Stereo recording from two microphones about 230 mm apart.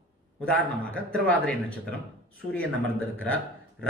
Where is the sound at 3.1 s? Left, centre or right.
Centre.